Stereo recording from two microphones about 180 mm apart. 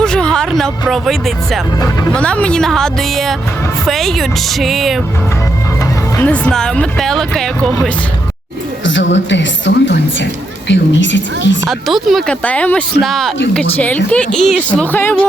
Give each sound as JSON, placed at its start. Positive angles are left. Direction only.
{"t": 0.0, "sound": "a sound", "side_deg": 5}
{"t": 1.8, "sound": "speech", "side_deg": 10}
{"t": 6.1, "sound": "speech", "side_deg": 10}
{"t": 8.8, "sound": "a woman's voice", "side_deg": 90}
{"t": 11.7, "sound": "speech", "side_deg": 0}